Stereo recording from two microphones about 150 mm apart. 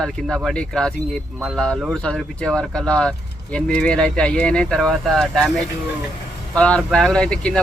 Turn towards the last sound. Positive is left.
turn(degrees=5)  # may be behind; listen again after turning